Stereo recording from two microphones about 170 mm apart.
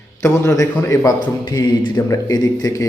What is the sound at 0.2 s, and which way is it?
A man's voice, 15° left (ahead or behind).